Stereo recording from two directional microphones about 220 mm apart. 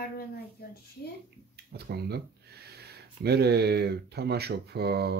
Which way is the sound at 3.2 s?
45° right (ahead or behind).